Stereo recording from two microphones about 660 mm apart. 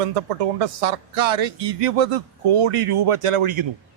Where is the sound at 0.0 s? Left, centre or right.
Right.